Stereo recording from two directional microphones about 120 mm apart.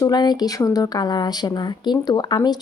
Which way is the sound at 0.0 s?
35° left (ahead or behind).